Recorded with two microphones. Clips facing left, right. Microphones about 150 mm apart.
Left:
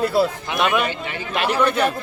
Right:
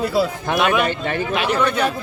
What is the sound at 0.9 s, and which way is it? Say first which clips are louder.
Speech: right 6 dB; 55° right (ahead or behind).